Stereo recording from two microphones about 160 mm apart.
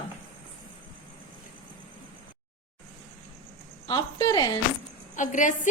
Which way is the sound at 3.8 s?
30° left (ahead or behind).